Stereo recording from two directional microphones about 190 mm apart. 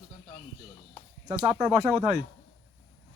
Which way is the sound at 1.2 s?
15° right (ahead or behind).